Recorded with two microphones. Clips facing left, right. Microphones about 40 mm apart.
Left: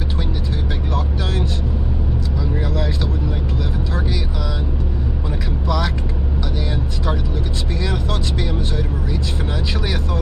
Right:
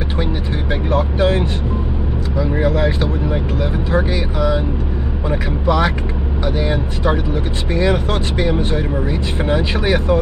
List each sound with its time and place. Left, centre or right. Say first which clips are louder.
0.8 s vehicle: right 11 dB; right
2.3 s speech: right 9 dB; right